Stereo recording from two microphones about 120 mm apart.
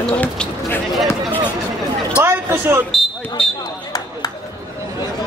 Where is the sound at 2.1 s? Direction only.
20° right (ahead or behind).